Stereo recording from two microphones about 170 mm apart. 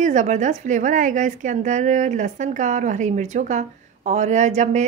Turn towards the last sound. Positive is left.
turn(degrees=-45)  # may be behind; listen again after turning